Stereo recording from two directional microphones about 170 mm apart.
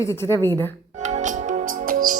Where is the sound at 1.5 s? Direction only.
50° right (ahead or behind).